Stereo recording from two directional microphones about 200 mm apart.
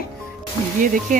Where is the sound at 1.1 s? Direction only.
40° right (ahead or behind).